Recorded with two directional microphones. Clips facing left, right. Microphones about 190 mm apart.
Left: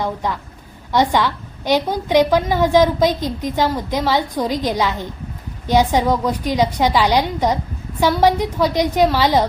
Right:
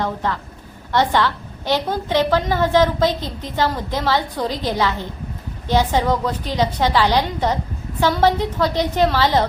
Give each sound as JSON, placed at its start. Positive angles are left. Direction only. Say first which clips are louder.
{"t": 0.0, "sound": "a woman's voice", "louder": "even", "side_deg": 15}